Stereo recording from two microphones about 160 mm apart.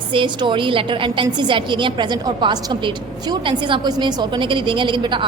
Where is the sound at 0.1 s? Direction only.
30° right (ahead or behind).